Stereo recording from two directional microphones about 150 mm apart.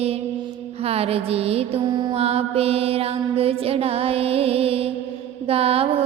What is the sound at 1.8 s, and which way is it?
Mantra, 25° right (ahead or behind).